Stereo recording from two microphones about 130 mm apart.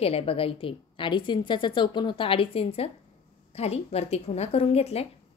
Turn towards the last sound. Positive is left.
turn(degrees=50)  # may be behind; listen again after turning